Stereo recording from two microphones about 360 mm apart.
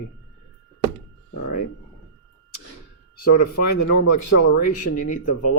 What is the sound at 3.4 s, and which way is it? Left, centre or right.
Speech, left.